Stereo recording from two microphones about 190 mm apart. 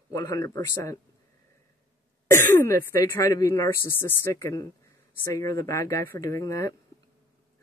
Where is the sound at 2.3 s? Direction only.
10° left (ahead or behind).